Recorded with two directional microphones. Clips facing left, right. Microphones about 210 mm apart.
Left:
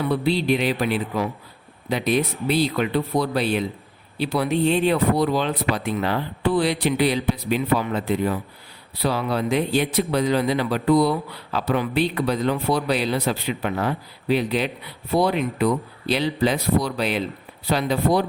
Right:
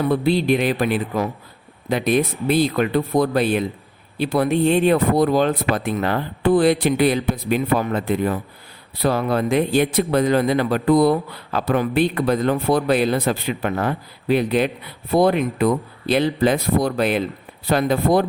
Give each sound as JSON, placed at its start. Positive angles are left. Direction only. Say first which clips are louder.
{"t": 0.0, "sound": "speech", "louder": "right 3 dB", "side_deg": -50}